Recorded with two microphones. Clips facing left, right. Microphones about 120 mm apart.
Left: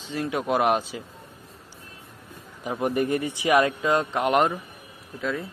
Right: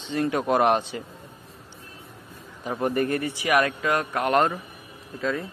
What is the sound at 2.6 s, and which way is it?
A man's voice, 15° left (ahead or behind).